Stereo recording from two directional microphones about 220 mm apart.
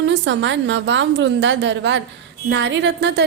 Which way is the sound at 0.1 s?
55° right (ahead or behind).